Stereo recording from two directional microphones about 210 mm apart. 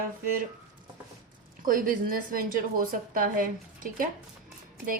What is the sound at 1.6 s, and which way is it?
A woman's voice, 40° right (ahead or behind).